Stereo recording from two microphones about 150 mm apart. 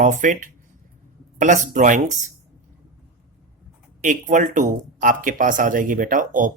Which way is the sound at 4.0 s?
55° right (ahead or behind).